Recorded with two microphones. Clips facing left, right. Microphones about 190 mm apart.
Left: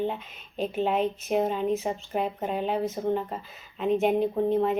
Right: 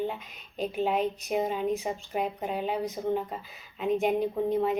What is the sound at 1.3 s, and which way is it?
Speech, 55° left (ahead or behind).